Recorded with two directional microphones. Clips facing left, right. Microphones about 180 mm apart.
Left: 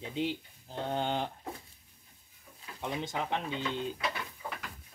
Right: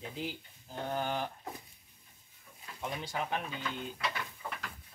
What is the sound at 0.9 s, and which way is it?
Speech, 25° left (ahead or behind).